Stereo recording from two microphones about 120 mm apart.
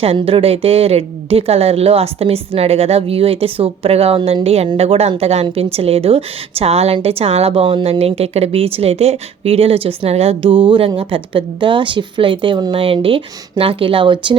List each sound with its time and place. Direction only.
0.0 s a woman's voice: 55° right (ahead or behind)